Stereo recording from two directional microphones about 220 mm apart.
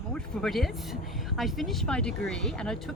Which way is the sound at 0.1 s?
Centre (ahead or behind).